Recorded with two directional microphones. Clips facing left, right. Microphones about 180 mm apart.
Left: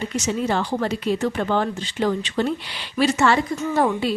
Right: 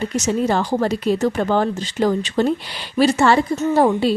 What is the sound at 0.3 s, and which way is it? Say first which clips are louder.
A woman's voice: right 4 dB; 40° right (ahead or behind).